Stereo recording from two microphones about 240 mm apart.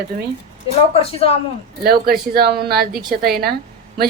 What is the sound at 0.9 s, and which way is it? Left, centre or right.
Speech, left.